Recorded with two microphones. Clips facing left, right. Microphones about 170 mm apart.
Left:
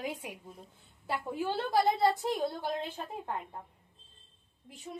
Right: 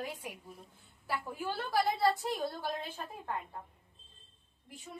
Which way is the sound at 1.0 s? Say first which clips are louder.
Left 4 dB; 20° left (ahead or behind).